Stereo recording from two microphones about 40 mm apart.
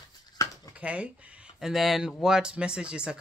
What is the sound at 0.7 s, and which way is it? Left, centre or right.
Speech, right.